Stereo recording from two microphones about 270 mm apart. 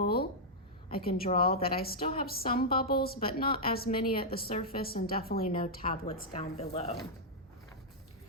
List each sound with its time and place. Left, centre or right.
0.0 s a sound: left
1.1 s a woman's voice: left
5.4 s speech: left